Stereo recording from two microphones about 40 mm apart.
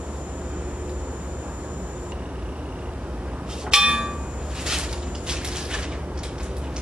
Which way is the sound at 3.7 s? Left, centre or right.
Centre.